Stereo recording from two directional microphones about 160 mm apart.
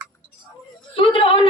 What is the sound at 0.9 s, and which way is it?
Speech, 35° left (ahead or behind).